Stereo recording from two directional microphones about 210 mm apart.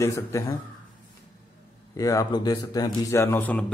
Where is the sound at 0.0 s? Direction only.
15° left (ahead or behind).